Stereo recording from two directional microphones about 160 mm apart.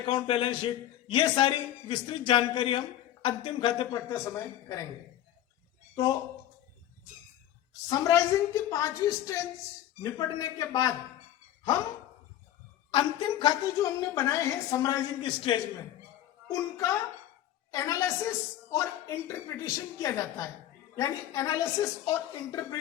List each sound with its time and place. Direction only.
0.0 s a man's voice: 35° left (ahead or behind)
4.1 s a woman's voice: 20° left (ahead or behind)
7.9 s a woman's voice: 20° left (ahead or behind)
12.9 s a woman's voice: 30° left (ahead or behind)
16.5 s a woman's voice: 20° left (ahead or behind)